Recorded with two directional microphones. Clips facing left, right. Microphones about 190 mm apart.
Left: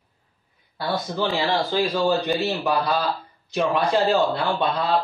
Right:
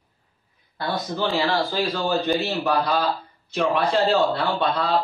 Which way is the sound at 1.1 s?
15° left (ahead or behind).